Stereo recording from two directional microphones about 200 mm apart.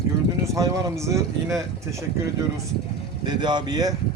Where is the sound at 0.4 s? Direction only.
15° right (ahead or behind).